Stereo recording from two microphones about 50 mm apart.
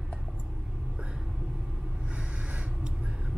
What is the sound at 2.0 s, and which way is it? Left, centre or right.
Snort, right.